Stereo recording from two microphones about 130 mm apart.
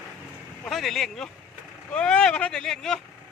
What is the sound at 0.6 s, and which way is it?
Speech, centre (ahead or behind).